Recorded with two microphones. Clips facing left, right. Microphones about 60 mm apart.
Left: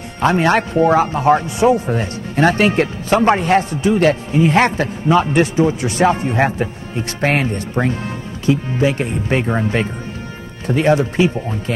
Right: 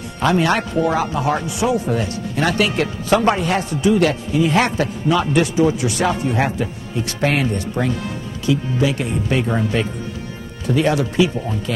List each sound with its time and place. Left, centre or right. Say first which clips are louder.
0.2 s speech: left 3 dB; left